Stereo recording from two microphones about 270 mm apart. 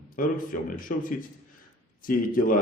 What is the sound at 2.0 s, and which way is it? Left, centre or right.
Speech, left.